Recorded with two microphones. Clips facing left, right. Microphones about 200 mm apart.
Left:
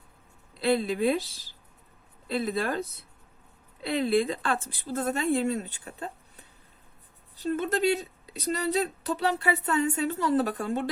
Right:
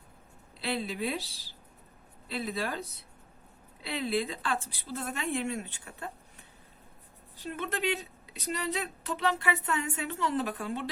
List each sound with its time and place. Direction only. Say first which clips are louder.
0.6 s speech: left 8 dB; 50° left (ahead or behind)
2.6 s speech: left 4 dB; 50° left (ahead or behind)
3.9 s speech: left 6 dB; 50° left (ahead or behind)
7.5 s speech: left 7 dB; 40° left (ahead or behind)